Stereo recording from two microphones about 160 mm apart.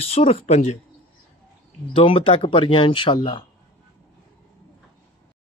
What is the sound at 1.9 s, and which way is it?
Speech, 35° left (ahead or behind).